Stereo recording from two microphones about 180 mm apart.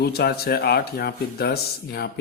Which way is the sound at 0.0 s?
65° left (ahead or behind).